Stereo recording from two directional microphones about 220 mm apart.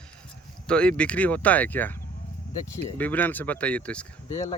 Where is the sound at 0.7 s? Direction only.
5° left (ahead or behind).